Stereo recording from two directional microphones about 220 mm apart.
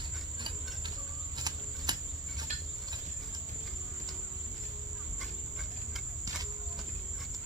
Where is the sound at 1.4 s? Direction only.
20° right (ahead or behind).